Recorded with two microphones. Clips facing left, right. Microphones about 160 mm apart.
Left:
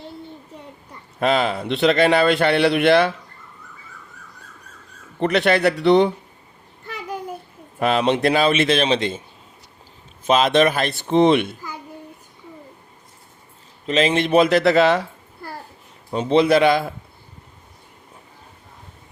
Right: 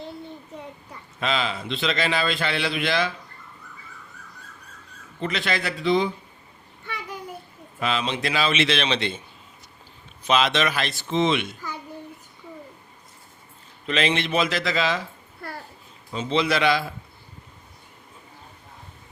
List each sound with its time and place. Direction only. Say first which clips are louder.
1.2 s a man's voice: left 7 dB; 55° left (ahead or behind)
5.2 s a man's voice: left 10 dB; 65° left (ahead or behind)
7.8 s a man's voice: left 8 dB; 55° left (ahead or behind)
10.2 s a man's voice: left 6 dB; 45° left (ahead or behind)
13.8 s a man's voice: left 5 dB; 40° left (ahead or behind); by 15.0 s 60° left (ahead or behind)
16.1 s a man's voice: left 8 dB; 55° left (ahead or behind)